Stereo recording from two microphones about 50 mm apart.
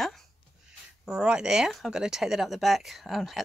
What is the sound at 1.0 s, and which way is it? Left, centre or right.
Speech, centre.